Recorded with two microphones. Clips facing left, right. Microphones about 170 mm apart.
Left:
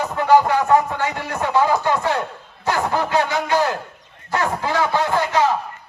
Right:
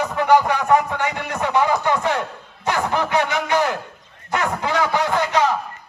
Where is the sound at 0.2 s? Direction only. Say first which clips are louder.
Left 2 dB; 20° right (ahead or behind).